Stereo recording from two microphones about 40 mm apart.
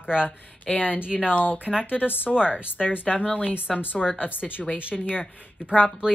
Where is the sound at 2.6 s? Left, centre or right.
Left.